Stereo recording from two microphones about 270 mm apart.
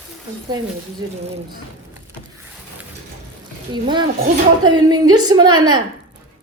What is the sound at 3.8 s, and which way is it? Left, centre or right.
A woman's voice, centre.